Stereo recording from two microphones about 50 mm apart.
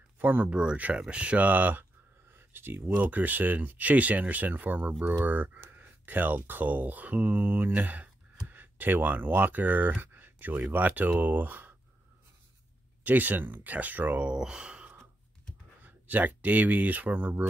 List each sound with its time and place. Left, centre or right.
0.2 s speech: right
0.5 s speech: centre; by 1.9 s right
2.3 s a sound: right
2.9 s speech: right
13.0 s speech: right
14.3 s speech: centre
15.8 s speech: right